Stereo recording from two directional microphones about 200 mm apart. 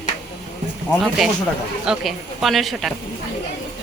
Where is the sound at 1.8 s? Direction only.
Centre (ahead or behind).